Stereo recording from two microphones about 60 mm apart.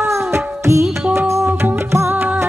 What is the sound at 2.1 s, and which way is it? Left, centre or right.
Music, right.